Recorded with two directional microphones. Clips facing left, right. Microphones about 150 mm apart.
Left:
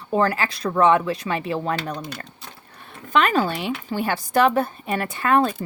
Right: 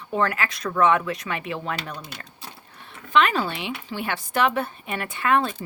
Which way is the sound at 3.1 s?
45° left (ahead or behind).